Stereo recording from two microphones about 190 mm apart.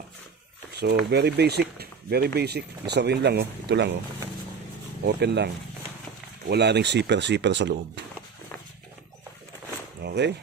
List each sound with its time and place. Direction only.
0.7 s speech: 60° right (ahead or behind)
5.0 s speech: 60° right (ahead or behind)
6.5 s speech: 65° right (ahead or behind)
10.0 s a sound: 65° right (ahead or behind)